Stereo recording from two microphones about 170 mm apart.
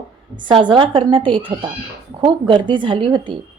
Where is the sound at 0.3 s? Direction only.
25° right (ahead or behind).